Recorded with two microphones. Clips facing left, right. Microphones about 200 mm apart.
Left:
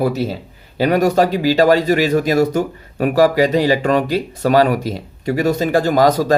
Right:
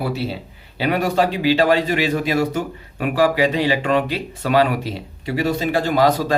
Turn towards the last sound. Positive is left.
turn(degrees=45)  # may be behind; listen again after turning